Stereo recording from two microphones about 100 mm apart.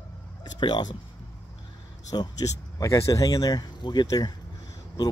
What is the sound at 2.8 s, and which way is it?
A man's voice, 30° left (ahead or behind).